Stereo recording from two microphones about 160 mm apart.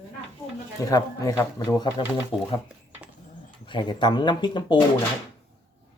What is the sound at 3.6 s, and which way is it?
Speech, 30° left (ahead or behind).